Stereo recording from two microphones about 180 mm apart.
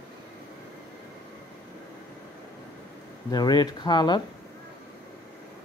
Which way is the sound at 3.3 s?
20° left (ahead or behind).